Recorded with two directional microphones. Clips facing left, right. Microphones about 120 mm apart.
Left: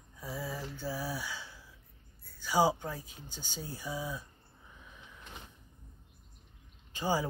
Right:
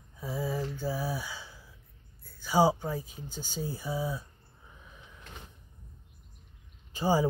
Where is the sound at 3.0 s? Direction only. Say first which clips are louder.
Right 7 dB; 45° right (ahead or behind).